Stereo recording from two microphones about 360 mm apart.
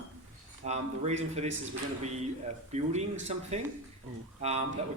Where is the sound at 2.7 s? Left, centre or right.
Centre.